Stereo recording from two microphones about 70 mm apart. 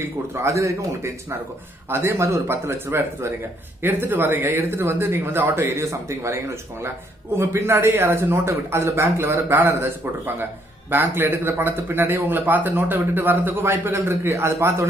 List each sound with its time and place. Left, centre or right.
0.3 s a man's voice: right